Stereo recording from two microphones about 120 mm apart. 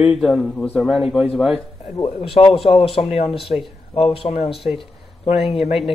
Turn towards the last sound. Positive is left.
turn(degrees=55)  # may be behind; listen again after turning